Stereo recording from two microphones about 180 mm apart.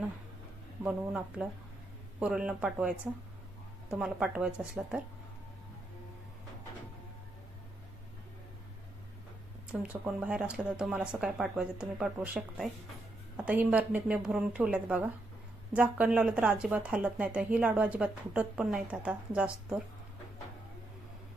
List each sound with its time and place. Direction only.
0.9 s speech: 5° right (ahead or behind)
3.9 s speech: 5° right (ahead or behind)
9.8 s speech: 5° right (ahead or behind)